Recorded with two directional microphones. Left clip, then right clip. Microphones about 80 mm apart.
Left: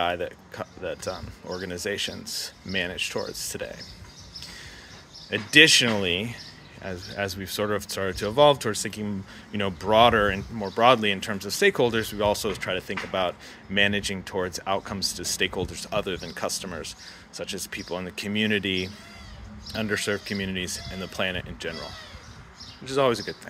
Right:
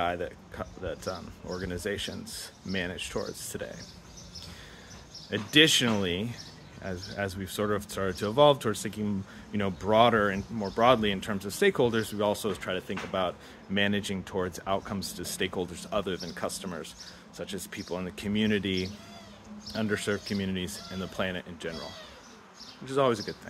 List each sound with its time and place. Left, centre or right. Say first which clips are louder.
0.0 s speech: left 4 dB; right
5.3 s speech: left 6 dB; right
22.8 s speech: left 3 dB; right